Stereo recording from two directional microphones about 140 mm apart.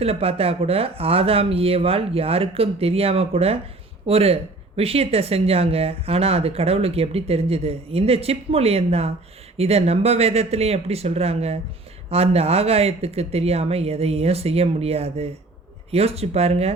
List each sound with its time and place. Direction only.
0.0 s speech: 45° right (ahead or behind)